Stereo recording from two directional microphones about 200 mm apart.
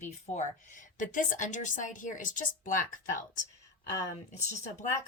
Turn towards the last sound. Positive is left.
turn(degrees=35)  # may be behind; listen again after turning